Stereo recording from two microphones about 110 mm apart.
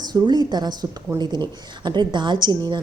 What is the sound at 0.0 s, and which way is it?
A woman's voice, 40° right (ahead or behind).